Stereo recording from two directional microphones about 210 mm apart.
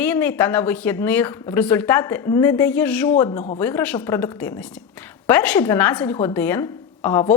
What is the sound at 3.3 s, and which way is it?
Speech, 35° left (ahead or behind).